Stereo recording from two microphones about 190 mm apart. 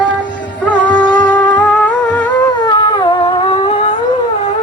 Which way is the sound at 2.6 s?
25° left (ahead or behind).